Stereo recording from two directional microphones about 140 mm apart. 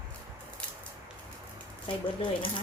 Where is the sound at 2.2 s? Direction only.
35° left (ahead or behind).